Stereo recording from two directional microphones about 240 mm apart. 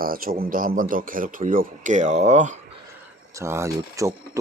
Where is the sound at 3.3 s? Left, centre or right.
Centre.